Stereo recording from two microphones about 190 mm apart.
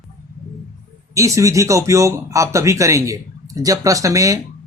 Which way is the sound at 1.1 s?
15° right (ahead or behind).